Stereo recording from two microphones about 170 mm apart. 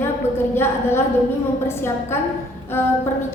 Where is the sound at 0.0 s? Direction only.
15° left (ahead or behind).